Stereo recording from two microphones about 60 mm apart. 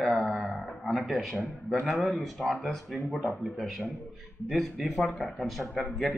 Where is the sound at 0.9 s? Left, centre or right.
Centre.